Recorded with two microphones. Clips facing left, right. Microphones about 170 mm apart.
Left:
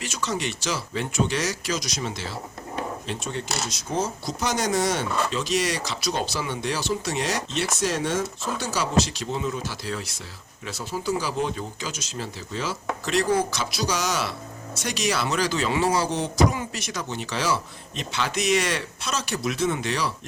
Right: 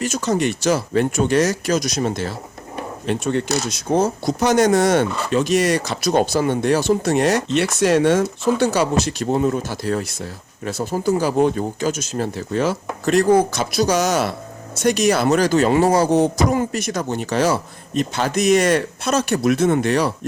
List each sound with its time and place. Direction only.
0.0 s speech: 45° right (ahead or behind)